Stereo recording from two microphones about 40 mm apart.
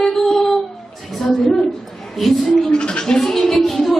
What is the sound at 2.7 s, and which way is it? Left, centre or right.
Speech, left.